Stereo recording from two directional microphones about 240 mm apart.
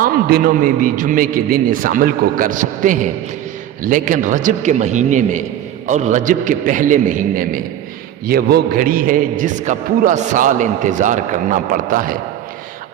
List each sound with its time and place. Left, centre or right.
0.0 s a man's voice: right